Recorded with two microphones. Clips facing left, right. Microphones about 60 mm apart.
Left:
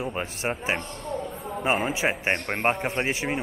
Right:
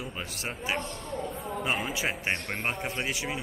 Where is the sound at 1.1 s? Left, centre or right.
Centre.